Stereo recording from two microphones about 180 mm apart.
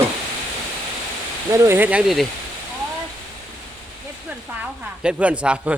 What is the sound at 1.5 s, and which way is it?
Speech, 15° right (ahead or behind).